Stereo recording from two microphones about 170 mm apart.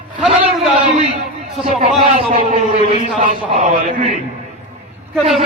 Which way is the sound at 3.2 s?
45° right (ahead or behind).